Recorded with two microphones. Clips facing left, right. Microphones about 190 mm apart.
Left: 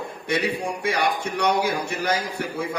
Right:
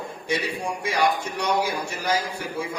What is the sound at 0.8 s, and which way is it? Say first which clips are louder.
A man's voice: right 1 dB; 60° left (ahead or behind).